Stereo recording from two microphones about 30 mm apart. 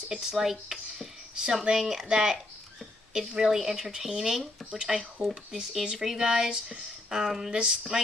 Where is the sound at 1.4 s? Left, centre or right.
Right.